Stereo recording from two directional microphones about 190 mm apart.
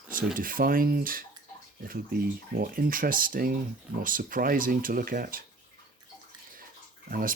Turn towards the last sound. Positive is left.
turn(degrees=-50)  # may be behind; listen again after turning